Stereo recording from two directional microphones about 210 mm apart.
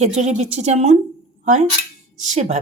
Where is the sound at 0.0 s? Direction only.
30° right (ahead or behind).